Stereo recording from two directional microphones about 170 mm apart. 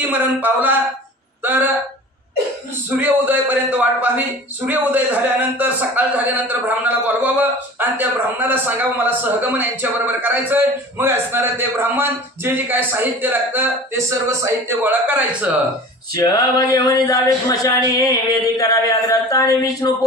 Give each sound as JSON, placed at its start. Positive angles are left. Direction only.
{"t": 0.0, "sound": "a man's voice", "side_deg": -10}
{"t": 3.0, "sound": "a man's voice", "side_deg": -10}
{"t": 16.2, "sound": "speech", "side_deg": 20}